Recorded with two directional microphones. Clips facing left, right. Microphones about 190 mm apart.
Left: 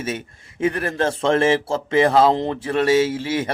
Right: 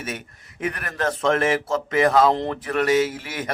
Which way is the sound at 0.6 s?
30° left (ahead or behind).